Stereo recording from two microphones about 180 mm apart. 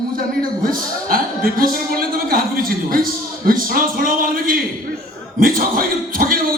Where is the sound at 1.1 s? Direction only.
55° right (ahead or behind).